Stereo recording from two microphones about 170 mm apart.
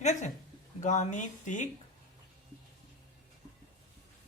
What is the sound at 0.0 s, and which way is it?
Speech, 45° left (ahead or behind).